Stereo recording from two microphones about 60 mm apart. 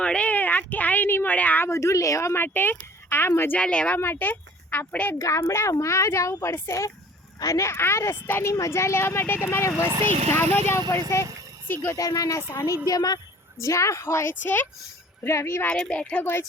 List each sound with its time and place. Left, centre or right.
0.0 s speech: centre
1.6 s speech: left
2.3 s speech: left
3.6 s speech: centre
3.9 s speech: left
5.2 s speech: left
8.5 s speech: left
11.9 s speech: left
12.5 s a woman's voice: left
13.6 s speech: left
15.2 s speech: left
15.7 s speech: centre